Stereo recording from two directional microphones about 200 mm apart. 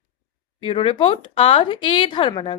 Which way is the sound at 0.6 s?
25° left (ahead or behind).